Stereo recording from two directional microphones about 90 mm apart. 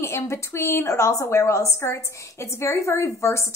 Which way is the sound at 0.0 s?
30° left (ahead or behind).